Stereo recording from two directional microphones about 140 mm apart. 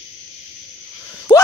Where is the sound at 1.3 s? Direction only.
35° left (ahead or behind).